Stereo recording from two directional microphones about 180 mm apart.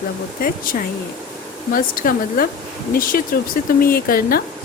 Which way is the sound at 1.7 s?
50° left (ahead or behind).